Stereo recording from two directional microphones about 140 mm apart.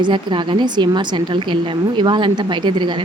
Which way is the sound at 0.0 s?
35° right (ahead or behind).